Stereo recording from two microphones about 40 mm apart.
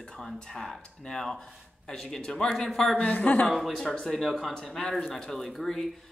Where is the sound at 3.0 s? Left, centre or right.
Left.